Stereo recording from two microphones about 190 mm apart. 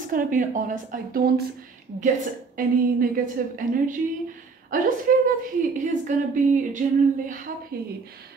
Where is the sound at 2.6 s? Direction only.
45° right (ahead or behind).